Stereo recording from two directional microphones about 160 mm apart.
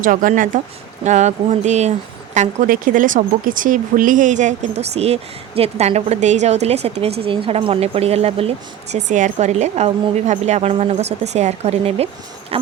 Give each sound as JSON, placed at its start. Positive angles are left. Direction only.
{"t": 0.0, "sound": "speech", "side_deg": -55}